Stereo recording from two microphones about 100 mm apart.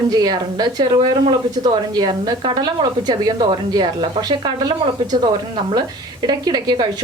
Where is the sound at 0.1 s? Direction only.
40° right (ahead or behind).